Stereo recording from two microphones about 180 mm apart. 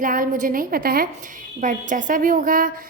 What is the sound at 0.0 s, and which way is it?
A woman's voice, 50° right (ahead or behind).